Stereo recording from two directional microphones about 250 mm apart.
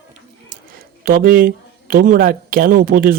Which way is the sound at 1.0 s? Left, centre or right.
Right.